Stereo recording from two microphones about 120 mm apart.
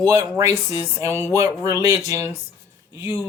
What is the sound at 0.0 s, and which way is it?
Speech, 25° right (ahead or behind).